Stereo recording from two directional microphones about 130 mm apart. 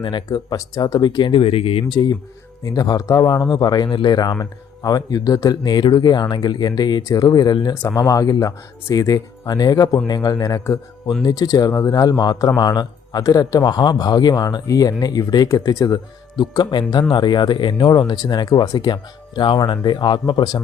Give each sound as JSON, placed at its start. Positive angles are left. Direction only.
{"t": 0.0, "sound": "a man's voice", "side_deg": 35}